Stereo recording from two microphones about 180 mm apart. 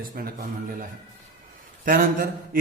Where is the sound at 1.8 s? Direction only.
50° right (ahead or behind).